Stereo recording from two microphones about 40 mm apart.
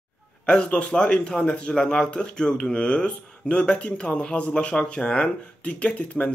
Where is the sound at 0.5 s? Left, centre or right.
Left.